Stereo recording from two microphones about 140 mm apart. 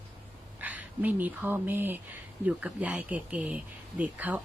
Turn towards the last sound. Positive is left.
turn(degrees=-10)  # may be behind; listen again after turning